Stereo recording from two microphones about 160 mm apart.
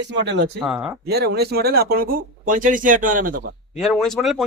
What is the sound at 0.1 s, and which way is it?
Speech, 90° right.